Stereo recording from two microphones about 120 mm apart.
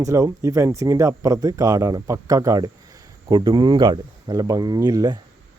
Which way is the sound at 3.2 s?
40° right (ahead or behind).